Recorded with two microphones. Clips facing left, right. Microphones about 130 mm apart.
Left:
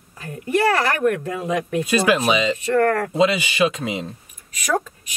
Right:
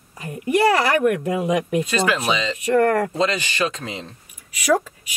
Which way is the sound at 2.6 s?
15° right (ahead or behind).